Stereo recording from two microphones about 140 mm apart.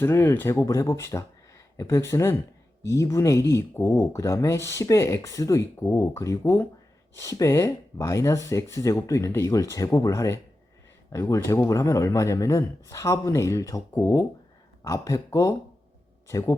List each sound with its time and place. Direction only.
0.0 s speech: 15° left (ahead or behind)